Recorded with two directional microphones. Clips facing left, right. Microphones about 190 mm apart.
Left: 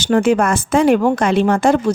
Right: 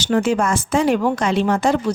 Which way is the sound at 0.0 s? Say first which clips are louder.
Left 4 dB; 50° left (ahead or behind).